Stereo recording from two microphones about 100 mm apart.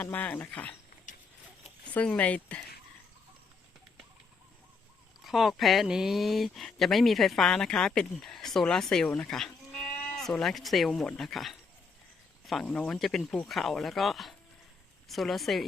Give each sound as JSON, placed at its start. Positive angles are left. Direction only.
{"t": 0.0, "sound": "speech", "side_deg": 15}
{"t": 1.8, "sound": "speech", "side_deg": 10}
{"t": 5.2, "sound": "speech", "side_deg": 0}